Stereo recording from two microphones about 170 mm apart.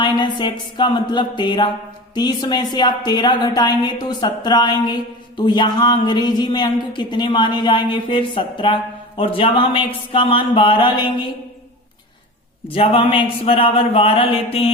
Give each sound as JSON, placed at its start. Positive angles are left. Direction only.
{"t": 0.0, "sound": "a woman's voice", "side_deg": 25}
{"t": 12.6, "sound": "a man's voice", "side_deg": 35}